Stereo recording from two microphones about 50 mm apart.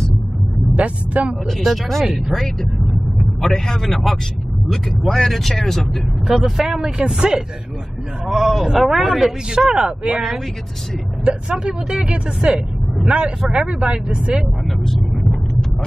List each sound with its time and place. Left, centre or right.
0.7 s speech: right
1.5 s speech: centre
6.2 s speech: centre
8.3 s speech: centre
9.8 s speech: right
11.2 s speech: centre
13.7 s speech: right
14.9 s vehicle: centre